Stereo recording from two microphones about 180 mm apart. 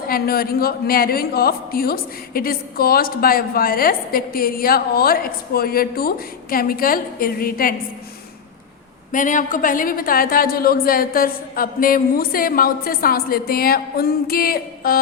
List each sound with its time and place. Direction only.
0.1 s a woman's voice: 55° left (ahead or behind)
9.1 s a woman's voice: 45° left (ahead or behind)